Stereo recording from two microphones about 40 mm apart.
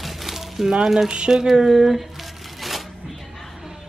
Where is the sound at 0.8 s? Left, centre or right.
Centre.